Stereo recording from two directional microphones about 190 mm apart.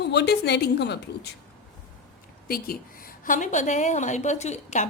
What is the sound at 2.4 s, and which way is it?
A woman's voice, 50° left (ahead or behind).